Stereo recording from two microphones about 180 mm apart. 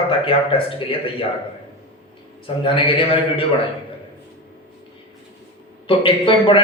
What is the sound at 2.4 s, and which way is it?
Speech, 30° left (ahead or behind).